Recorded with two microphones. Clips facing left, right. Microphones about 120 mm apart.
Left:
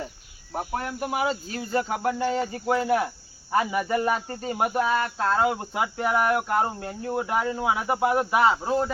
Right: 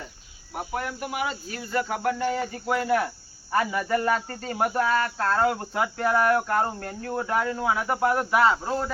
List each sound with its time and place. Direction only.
0.5 s speech: 30° left (ahead or behind)